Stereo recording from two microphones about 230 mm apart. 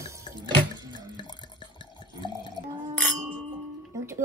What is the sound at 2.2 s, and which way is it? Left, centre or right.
Drip, centre.